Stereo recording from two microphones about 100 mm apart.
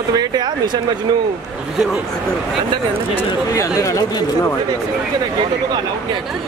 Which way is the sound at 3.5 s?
35° left (ahead or behind).